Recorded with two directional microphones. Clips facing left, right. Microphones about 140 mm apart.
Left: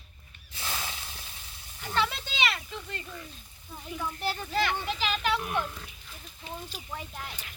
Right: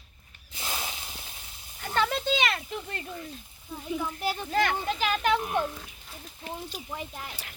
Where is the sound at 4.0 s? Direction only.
15° right (ahead or behind).